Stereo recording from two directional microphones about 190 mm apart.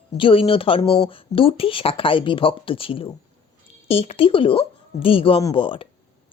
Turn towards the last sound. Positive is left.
turn(degrees=30)  # may be behind; listen again after turning